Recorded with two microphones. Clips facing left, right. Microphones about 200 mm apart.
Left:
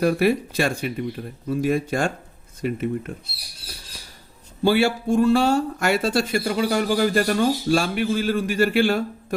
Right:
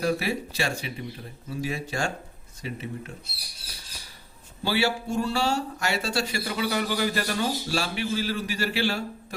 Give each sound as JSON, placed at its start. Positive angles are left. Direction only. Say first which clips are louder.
{"t": 0.0, "sound": "speech", "louder": "left 7 dB", "side_deg": 55}
{"t": 4.6, "sound": "speech", "louder": "left 7 dB", "side_deg": 50}